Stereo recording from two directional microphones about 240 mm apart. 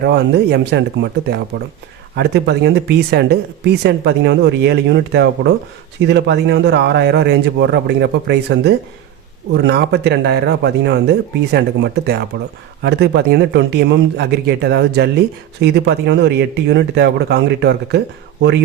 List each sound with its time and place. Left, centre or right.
0.0 s speech: right